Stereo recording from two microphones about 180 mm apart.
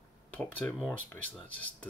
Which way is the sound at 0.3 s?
10° left (ahead or behind).